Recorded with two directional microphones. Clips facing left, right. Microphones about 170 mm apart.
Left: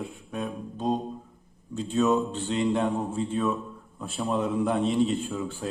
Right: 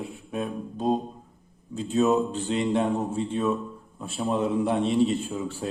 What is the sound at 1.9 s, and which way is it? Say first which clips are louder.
Speech: right 2 dB; 35° right (ahead or behind).